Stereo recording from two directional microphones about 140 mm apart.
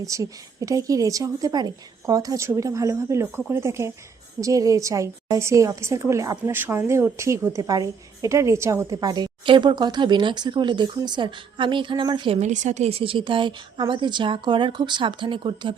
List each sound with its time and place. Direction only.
0.0 s a woman's voice: 25° right (ahead or behind)
12.4 s a woman's voice: 55° right (ahead or behind); by 15.7 s 35° right (ahead or behind)